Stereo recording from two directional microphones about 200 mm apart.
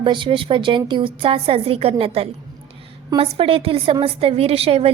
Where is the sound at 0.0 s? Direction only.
25° right (ahead or behind).